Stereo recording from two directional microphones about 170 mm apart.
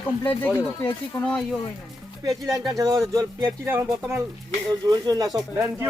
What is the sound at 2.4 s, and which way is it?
Speech, 20° right (ahead or behind).